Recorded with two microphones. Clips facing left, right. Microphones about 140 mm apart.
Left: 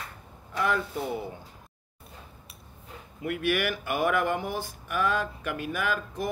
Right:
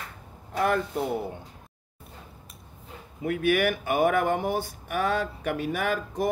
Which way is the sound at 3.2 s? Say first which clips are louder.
Right 4 dB; 50° right (ahead or behind).